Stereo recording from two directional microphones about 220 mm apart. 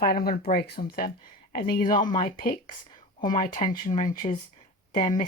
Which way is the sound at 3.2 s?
20° left (ahead or behind).